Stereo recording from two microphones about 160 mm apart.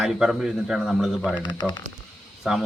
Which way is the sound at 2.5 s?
Centre (ahead or behind).